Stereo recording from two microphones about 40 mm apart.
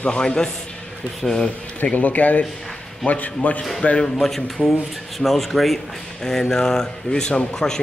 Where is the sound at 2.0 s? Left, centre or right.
Left.